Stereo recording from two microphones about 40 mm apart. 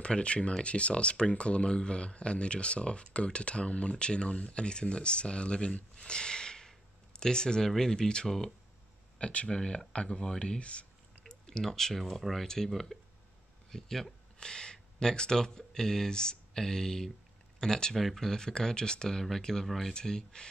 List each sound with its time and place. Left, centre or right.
0.0 s speech: left
5.9 s a sound: left
7.2 s speech: centre
9.2 s speech: left
11.2 s a sound: centre
12.0 s speech: centre
14.4 s speech: centre